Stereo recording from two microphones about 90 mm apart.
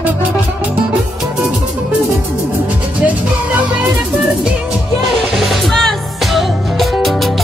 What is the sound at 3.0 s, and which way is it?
Music, 15° right (ahead or behind).